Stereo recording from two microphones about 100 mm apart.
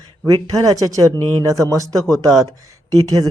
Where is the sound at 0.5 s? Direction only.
35° right (ahead or behind).